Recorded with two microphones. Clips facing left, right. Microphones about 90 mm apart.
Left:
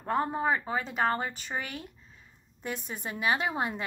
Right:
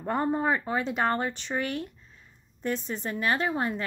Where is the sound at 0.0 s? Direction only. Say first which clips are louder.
Right 2 dB; centre (ahead or behind).